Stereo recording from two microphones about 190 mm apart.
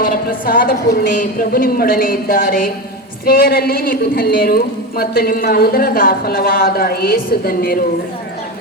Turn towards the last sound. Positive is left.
turn(degrees=50)  # may be behind; listen again after turning